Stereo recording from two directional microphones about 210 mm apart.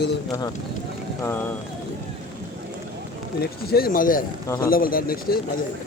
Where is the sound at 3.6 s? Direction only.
45° left (ahead or behind).